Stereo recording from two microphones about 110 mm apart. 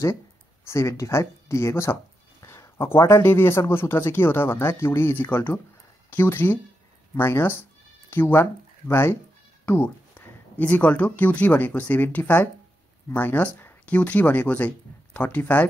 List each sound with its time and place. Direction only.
0.7 s speech: 30° left (ahead or behind)